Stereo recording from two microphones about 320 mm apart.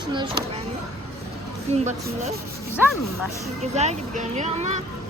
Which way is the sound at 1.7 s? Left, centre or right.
Centre.